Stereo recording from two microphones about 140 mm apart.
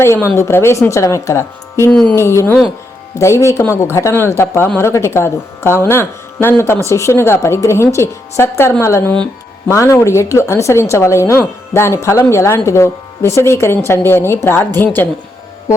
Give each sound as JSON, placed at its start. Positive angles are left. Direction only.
{"t": 0.0, "sound": "speech", "side_deg": 20}